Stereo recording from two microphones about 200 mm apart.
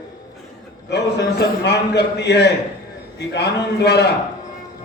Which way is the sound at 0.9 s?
60° left (ahead or behind).